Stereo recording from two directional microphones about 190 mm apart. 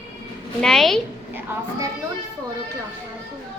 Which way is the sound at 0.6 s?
Centre (ahead or behind).